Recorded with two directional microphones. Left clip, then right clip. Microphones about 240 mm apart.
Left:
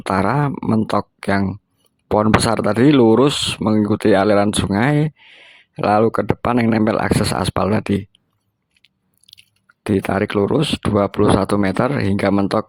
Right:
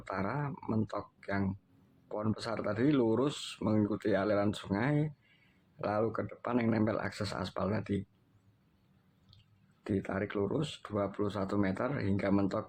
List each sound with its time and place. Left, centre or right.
0.0 s speech: left
9.8 s speech: left